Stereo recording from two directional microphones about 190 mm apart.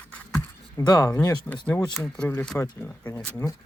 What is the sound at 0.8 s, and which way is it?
Speech, 20° left (ahead or behind).